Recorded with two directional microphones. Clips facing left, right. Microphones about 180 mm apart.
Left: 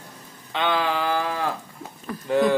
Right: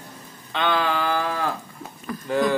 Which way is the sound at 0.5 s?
15° left (ahead or behind).